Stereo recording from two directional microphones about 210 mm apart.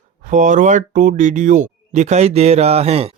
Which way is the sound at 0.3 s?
35° right (ahead or behind).